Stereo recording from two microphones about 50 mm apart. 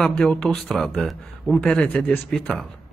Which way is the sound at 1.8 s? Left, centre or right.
Left.